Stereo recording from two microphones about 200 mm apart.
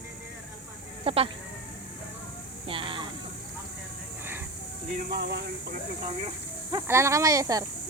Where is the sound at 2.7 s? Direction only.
25° right (ahead or behind).